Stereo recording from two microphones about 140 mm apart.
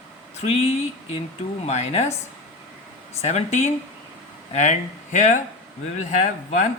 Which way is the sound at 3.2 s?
55° left (ahead or behind).